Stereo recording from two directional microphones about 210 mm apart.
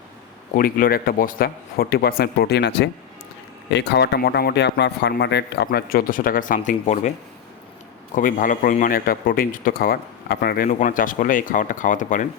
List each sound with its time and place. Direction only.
0.5 s speech: 40° left (ahead or behind)
8.1 s speech: 40° left (ahead or behind)